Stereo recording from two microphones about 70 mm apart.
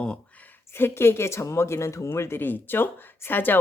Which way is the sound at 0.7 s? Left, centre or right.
Left.